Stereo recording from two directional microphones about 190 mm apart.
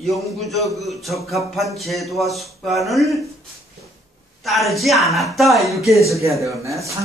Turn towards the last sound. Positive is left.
turn(degrees=-15)  # may be behind; listen again after turning